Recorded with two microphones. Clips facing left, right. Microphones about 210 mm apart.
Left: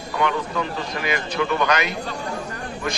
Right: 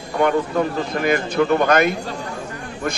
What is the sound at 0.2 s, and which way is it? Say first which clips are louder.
Speech: right 6 dB; 45° right (ahead or behind).